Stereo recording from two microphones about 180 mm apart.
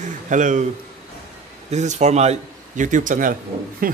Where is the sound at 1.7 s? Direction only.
40° right (ahead or behind).